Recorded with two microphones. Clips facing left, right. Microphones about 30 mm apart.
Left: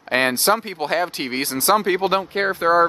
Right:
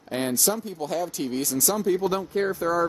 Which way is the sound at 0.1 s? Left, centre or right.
Left.